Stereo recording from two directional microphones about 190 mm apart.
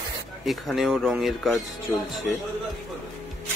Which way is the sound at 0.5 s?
Centre (ahead or behind).